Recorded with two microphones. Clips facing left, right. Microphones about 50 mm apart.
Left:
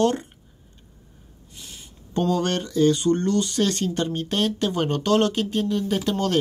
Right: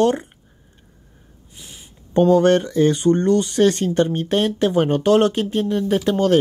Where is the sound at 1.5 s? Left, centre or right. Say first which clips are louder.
Right 1 dB; centre.